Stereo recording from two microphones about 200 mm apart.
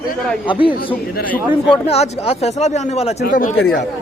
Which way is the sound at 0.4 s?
25° left (ahead or behind).